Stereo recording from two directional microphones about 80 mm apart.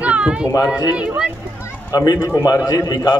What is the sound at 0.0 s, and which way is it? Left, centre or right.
Run, centre.